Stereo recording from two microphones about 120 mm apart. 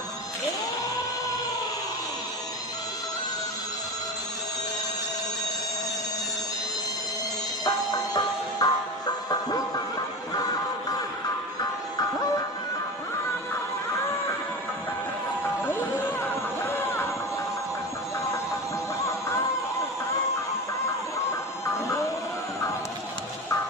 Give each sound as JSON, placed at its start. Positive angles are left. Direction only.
{"t": 7.6, "sound": "music", "side_deg": 35}
{"t": 15.6, "sound": "music", "side_deg": 15}
{"t": 16.6, "sound": "a sound", "side_deg": 20}
{"t": 21.8, "sound": "music", "side_deg": 25}